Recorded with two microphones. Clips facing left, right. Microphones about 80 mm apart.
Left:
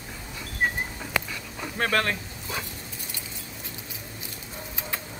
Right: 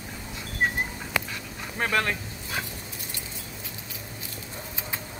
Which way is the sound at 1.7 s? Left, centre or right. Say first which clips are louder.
Left 1 dB; centre.